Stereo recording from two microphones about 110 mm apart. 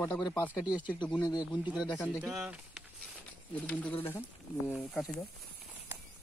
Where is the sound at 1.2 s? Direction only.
35° left (ahead or behind).